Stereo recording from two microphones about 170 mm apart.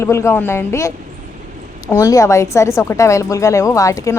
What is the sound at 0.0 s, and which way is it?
A woman's voice, 15° left (ahead or behind).